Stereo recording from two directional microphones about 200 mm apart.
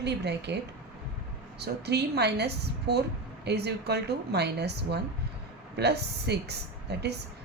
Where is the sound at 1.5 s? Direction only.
55° right (ahead or behind).